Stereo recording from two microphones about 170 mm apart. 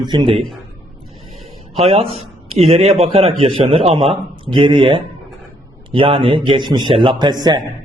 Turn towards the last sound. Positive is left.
turn(degrees=-25)  # may be behind; listen again after turning